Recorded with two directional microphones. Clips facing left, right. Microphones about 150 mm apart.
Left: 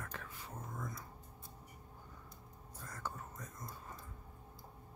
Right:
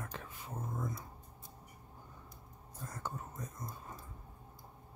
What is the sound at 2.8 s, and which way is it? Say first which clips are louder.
Whispering: right 2 dB; 20° right (ahead or behind).